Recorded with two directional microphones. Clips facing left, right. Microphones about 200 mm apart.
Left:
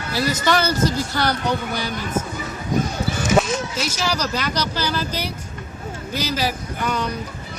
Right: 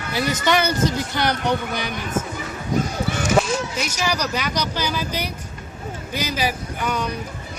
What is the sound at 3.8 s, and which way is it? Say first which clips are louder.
Speech: even; 15° right (ahead or behind).